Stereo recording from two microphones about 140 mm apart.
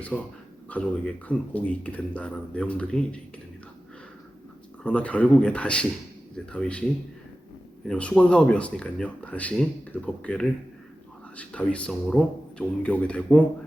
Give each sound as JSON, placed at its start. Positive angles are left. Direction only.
{"t": 0.1, "sound": "speech", "side_deg": 10}
{"t": 4.8, "sound": "speech", "side_deg": 10}
{"t": 7.9, "sound": "speech", "side_deg": 5}